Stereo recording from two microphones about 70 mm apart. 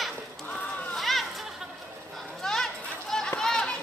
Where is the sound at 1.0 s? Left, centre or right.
Centre.